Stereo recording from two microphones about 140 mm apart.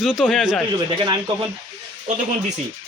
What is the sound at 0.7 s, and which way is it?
Speech, 35° right (ahead or behind).